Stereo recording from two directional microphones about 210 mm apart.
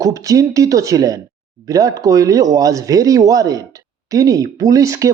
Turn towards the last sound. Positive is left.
turn(degrees=-15)  # may be behind; listen again after turning